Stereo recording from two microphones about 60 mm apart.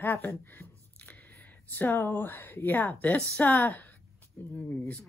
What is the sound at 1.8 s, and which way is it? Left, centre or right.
Speech, left.